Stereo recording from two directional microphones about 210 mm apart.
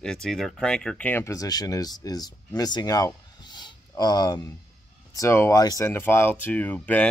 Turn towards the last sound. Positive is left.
turn(degrees=5)  # may be behind; listen again after turning